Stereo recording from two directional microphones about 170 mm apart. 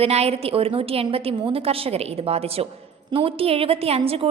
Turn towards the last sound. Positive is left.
turn(degrees=-35)  # may be behind; listen again after turning